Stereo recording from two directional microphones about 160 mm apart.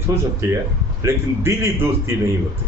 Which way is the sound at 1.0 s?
15° right (ahead or behind).